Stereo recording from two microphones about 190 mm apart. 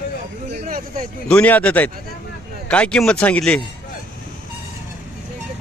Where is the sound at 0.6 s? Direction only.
50° right (ahead or behind).